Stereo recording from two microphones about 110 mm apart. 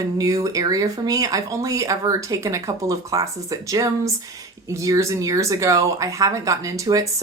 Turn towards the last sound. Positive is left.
turn(degrees=-30)  # may be behind; listen again after turning